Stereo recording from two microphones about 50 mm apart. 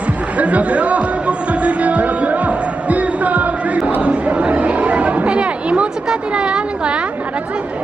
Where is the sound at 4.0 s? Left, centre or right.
Right.